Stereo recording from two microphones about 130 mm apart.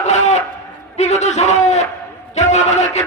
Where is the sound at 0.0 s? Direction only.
60° left (ahead or behind).